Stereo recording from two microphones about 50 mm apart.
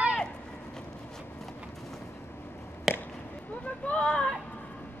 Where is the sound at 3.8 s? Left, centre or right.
Left.